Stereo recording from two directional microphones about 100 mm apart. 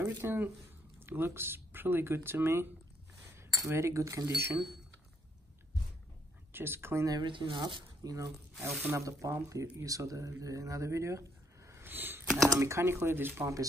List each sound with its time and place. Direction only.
0.0 s speech: 20° right (ahead or behind)
6.5 s speech: 25° right (ahead or behind)
7.1 s speech: 50° right (ahead or behind); by 13.6 s 20° right (ahead or behind)